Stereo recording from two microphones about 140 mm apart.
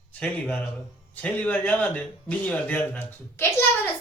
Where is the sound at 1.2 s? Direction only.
10° left (ahead or behind).